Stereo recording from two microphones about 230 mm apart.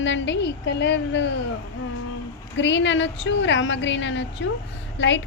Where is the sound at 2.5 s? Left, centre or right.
Left.